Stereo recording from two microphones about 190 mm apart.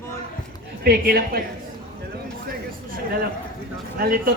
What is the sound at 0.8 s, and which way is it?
Speech, 50° right (ahead or behind).